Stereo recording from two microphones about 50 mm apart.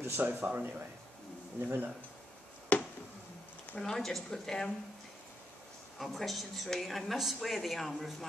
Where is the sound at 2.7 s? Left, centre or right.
Left.